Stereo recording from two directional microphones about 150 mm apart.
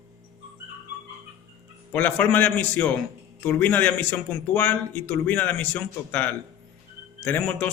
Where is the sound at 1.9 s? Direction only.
10° left (ahead or behind).